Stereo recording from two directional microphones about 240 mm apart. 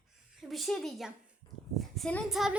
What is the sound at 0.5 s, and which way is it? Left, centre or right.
A woman's voice, centre.